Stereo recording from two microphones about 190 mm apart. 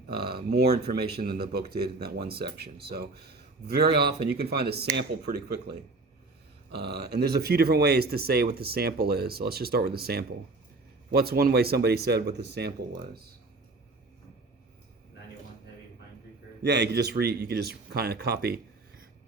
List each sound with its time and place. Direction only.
0.2 s speech: 55° right (ahead or behind)
16.6 s speech: 60° right (ahead or behind)